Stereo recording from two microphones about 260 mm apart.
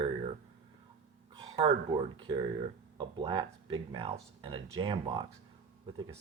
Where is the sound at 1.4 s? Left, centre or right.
Centre.